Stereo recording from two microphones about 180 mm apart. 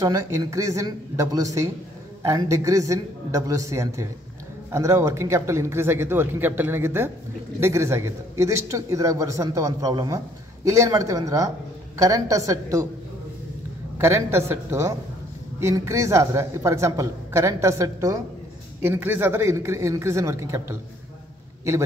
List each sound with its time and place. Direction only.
0.0 s a man's voice: 20° right (ahead or behind)
13.9 s a man's voice: 15° right (ahead or behind)